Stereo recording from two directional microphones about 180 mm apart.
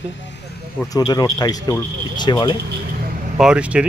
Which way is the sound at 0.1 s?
80° left.